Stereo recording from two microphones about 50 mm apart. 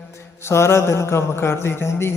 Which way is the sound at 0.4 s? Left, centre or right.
Left.